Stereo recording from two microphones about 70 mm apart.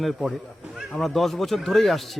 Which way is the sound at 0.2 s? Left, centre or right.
Centre.